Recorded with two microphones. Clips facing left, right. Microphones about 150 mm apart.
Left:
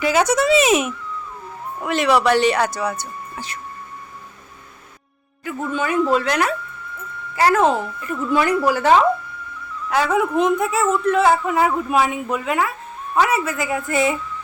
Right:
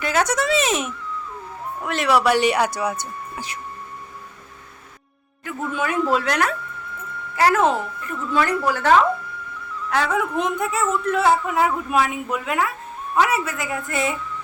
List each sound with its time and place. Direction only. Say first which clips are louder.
0.0 s a man's voice: left 4 dB; 5° left (ahead or behind); by 3.6 s 15° right (ahead or behind)
5.5 s a man's voice: left 2 dB; centre (ahead or behind)
8.3 s a man's voice: left 3 dB; 15° left (ahead or behind)